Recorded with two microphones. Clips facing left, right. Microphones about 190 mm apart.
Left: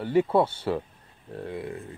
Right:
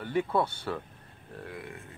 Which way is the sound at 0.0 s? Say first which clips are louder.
Left 6 dB; 30° left (ahead or behind).